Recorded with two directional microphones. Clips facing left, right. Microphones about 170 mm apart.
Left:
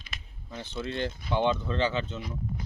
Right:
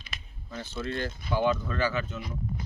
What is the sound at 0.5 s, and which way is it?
Speech, 20° left (ahead or behind).